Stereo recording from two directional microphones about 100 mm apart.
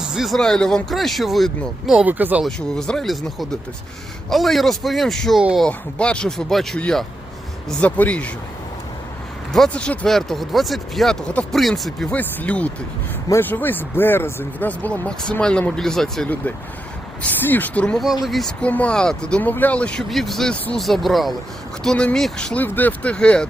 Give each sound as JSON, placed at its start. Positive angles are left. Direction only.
{"t": 0.1, "sound": "speech", "side_deg": 0}
{"t": 2.0, "sound": "speech", "side_deg": -15}
{"t": 2.4, "sound": "speech", "side_deg": 5}
{"t": 9.5, "sound": "speech", "side_deg": 10}
{"t": 12.1, "sound": "speech", "side_deg": 15}
{"t": 17.2, "sound": "speech", "side_deg": 20}
{"t": 18.0, "sound": "speech", "side_deg": -5}
{"t": 18.6, "sound": "speech", "side_deg": 15}
{"t": 22.5, "sound": "speech", "side_deg": 20}